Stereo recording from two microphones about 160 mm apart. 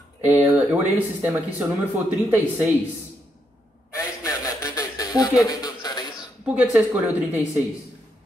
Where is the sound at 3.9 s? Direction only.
20° left (ahead or behind).